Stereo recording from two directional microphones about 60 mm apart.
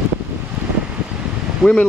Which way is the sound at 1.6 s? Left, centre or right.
Centre.